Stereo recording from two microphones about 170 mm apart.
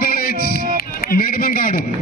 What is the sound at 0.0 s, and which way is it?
Music, 60° left (ahead or behind).